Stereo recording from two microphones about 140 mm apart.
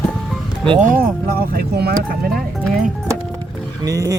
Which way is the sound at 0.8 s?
85° right.